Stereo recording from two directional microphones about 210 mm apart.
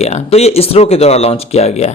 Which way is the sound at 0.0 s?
30° left (ahead or behind).